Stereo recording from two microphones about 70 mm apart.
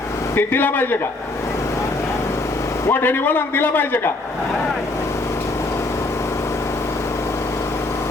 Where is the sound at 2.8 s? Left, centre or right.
Left.